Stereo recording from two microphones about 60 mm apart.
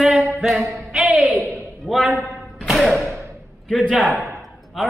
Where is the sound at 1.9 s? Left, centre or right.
Centre.